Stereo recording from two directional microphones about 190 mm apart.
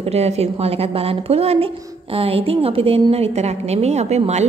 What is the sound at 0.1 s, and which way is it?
A woman's voice, 35° right (ahead or behind).